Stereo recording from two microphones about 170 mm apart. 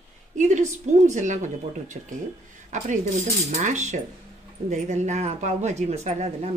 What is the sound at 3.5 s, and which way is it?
A woman's voice, 45° right (ahead or behind).